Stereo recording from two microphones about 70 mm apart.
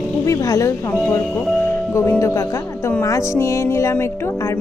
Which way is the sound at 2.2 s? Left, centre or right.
Left.